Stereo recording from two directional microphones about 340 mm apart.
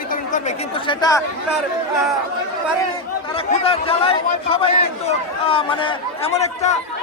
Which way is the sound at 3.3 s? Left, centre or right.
Centre.